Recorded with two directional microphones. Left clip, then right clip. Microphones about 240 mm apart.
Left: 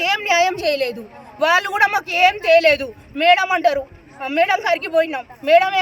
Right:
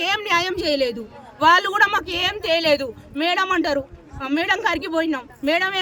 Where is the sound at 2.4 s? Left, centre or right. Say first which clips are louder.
Left 5 dB; centre.